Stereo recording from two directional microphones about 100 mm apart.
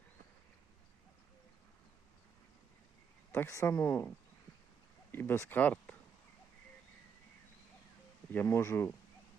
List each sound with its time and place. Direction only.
3.3 s speech: 30° left (ahead or behind)
5.1 s speech: 25° left (ahead or behind)
8.3 s speech: 20° left (ahead or behind)